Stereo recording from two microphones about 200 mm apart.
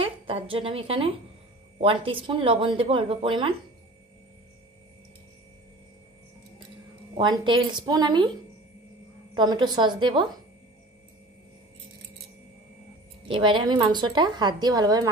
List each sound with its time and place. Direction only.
0.0 s a woman's voice: 25° right (ahead or behind)
7.2 s a woman's voice: 25° right (ahead or behind)
9.3 s a woman's voice: 20° right (ahead or behind)
13.3 s a woman's voice: 25° right (ahead or behind)